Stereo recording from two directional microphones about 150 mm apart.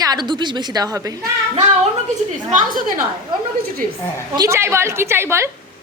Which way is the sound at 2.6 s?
65° right (ahead or behind).